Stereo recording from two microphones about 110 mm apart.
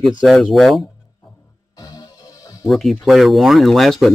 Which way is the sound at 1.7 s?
35° left (ahead or behind).